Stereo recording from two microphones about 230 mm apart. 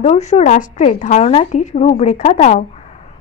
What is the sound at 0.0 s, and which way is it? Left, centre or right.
A woman's voice, left.